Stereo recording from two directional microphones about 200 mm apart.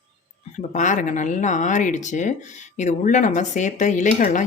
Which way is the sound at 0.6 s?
40° left (ahead or behind).